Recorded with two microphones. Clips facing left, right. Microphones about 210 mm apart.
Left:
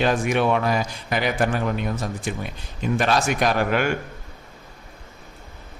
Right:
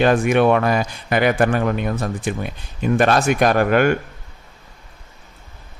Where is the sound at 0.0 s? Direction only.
55° right (ahead or behind).